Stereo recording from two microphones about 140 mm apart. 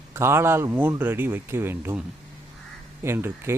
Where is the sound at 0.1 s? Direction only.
20° right (ahead or behind).